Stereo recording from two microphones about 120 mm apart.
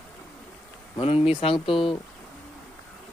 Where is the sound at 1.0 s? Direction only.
50° left (ahead or behind).